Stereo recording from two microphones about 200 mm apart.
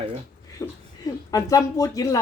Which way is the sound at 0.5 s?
15° left (ahead or behind).